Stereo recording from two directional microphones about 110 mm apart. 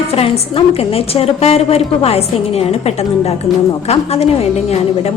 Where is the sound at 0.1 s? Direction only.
65° left (ahead or behind).